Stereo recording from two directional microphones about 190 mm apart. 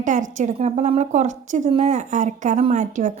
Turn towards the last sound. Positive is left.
turn(degrees=-40)  # may be behind; listen again after turning